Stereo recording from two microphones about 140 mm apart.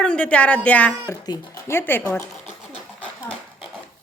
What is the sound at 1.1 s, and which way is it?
Speech, 20° left (ahead or behind).